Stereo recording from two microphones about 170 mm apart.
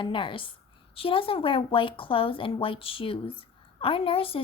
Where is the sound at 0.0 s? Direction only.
30° left (ahead or behind).